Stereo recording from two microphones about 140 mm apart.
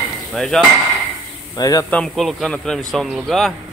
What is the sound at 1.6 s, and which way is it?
Speech, 25° left (ahead or behind).